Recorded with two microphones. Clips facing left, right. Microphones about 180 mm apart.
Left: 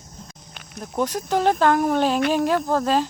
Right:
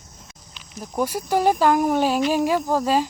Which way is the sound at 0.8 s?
10° right (ahead or behind).